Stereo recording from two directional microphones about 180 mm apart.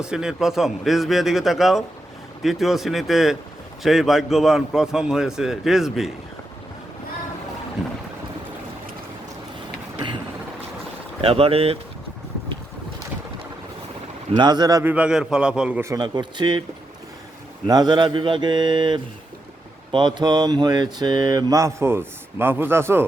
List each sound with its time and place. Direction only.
0.0 s a man's voice: 5° right (ahead or behind)
11.2 s speech: 30° right (ahead or behind)
14.3 s speech: 25° right (ahead or behind)
14.9 s a man's voice: 5° right (ahead or behind); by 16.6 s 25° right (ahead or behind)
17.7 s a man's voice: 25° right (ahead or behind)